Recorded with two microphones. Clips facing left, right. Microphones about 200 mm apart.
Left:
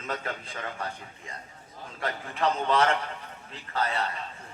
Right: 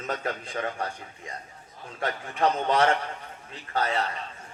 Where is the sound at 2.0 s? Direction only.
40° right (ahead or behind).